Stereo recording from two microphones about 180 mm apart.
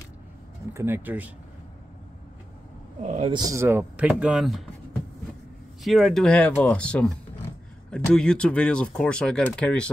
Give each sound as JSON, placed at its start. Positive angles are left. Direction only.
{"t": 0.7, "sound": "speech", "side_deg": -10}
{"t": 3.0, "sound": "speech", "side_deg": -35}
{"t": 3.3, "sound": "speech", "side_deg": -20}
{"t": 5.9, "sound": "speech", "side_deg": 0}